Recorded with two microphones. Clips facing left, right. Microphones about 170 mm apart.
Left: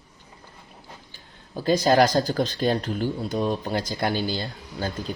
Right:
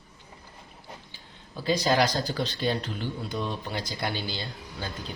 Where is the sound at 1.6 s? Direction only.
50° left (ahead or behind).